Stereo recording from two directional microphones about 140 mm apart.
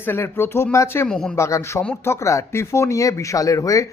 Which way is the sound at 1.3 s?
20° left (ahead or behind).